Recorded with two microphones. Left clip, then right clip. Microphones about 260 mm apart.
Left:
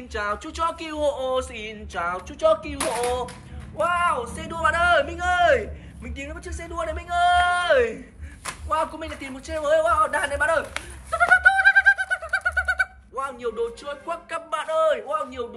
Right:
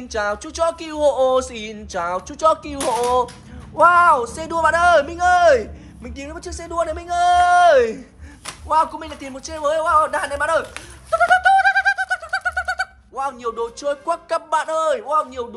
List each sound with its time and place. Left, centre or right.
0.1 s a man's voice: centre